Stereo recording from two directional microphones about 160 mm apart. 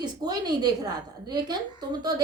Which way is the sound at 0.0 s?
25° right (ahead or behind).